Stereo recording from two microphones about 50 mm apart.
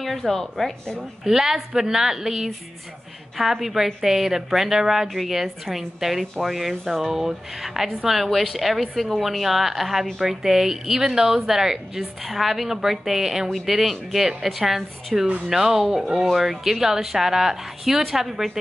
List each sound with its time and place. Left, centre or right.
0.0 s a woman's voice: centre
1.2 s a woman's voice: centre
15.2 s speech: right
15.5 s a woman's voice: centre